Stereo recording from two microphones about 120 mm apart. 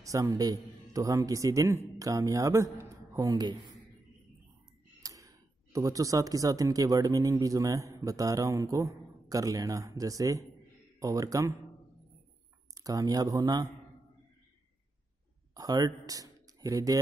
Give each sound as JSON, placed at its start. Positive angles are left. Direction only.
{"t": 0.0, "sound": "a man's voice", "side_deg": -30}
{"t": 5.0, "sound": "a man's voice", "side_deg": -25}
{"t": 12.7, "sound": "speech", "side_deg": -30}
{"t": 15.5, "sound": "speech", "side_deg": -35}